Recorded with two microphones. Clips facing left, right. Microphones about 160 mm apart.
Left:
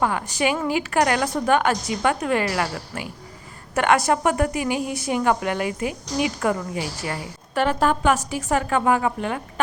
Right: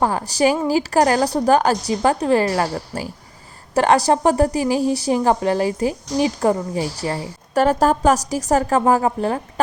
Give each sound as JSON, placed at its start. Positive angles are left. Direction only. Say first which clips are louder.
{"t": 0.0, "sound": "a woman's voice", "louder": "right 5 dB", "side_deg": -35}